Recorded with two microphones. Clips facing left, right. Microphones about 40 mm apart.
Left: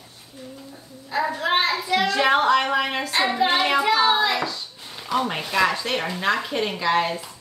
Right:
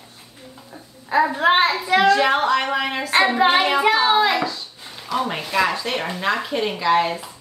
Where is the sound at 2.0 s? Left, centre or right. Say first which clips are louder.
Right 2 dB; centre.